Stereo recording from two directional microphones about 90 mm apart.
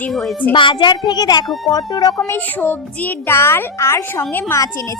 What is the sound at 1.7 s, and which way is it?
Speech, 45° left (ahead or behind).